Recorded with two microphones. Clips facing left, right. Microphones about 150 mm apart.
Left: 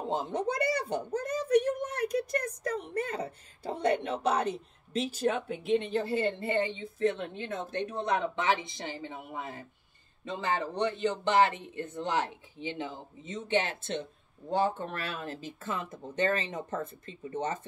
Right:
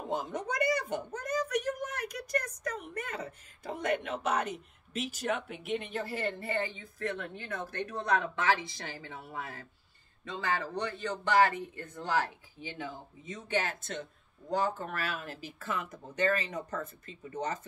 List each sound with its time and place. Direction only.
0.0 s a child's voice: 30° left (ahead or behind)